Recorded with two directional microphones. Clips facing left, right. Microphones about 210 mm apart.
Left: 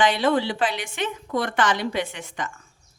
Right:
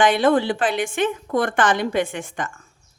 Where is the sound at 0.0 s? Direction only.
50° right (ahead or behind).